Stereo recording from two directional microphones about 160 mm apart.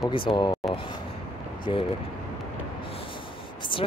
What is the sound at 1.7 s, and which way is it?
Speech, 30° left (ahead or behind).